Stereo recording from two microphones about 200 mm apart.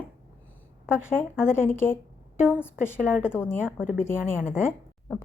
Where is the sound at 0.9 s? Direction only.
10° left (ahead or behind).